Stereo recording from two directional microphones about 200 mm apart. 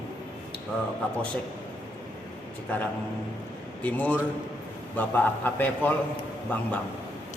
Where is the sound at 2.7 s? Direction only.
5° left (ahead or behind).